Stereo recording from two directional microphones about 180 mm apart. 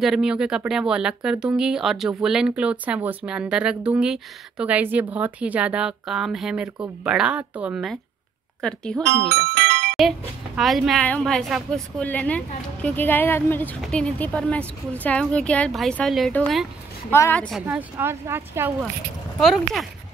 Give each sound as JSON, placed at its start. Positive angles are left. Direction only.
{"t": 0.0, "sound": "speech", "side_deg": -5}
{"t": 9.0, "sound": "speech", "side_deg": -65}
{"t": 9.9, "sound": "a woman's voice", "side_deg": 0}
{"t": 17.6, "sound": "speech", "side_deg": -10}
{"t": 19.4, "sound": "speech", "side_deg": 0}